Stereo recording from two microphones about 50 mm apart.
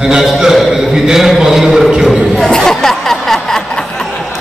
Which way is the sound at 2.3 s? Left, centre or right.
Centre.